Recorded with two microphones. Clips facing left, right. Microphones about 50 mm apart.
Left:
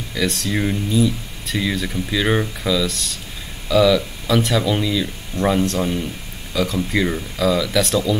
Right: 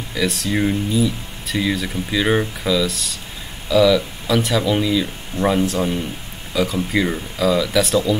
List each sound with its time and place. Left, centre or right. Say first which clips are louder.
0.1 s speech: right 1 dB; centre